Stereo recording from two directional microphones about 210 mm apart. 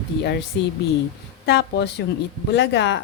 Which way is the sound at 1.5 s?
50° left (ahead or behind).